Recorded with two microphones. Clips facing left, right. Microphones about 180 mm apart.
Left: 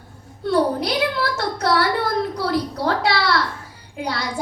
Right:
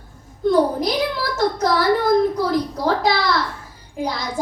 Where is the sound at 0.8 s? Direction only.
70° left (ahead or behind).